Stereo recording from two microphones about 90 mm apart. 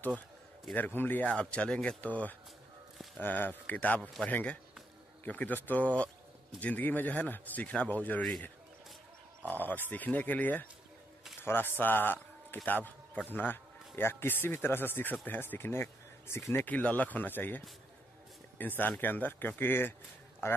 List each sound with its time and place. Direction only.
0.7 s speech: 20° left (ahead or behind)
9.4 s a man's voice: 20° left (ahead or behind)